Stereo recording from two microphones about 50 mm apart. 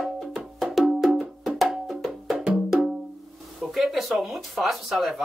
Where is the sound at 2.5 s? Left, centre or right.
Centre.